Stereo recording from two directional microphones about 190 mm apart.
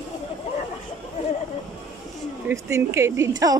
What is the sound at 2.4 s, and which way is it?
Speech, 15° right (ahead or behind).